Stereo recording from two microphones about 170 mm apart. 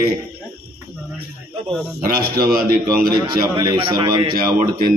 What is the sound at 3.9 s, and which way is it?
Speech, 25° right (ahead or behind).